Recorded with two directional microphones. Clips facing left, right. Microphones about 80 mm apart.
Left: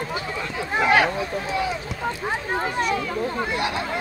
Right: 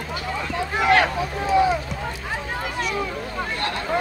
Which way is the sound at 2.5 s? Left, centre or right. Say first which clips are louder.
Left 5 dB; left.